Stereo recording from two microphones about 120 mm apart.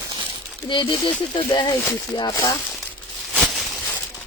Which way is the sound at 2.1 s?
30° left (ahead or behind).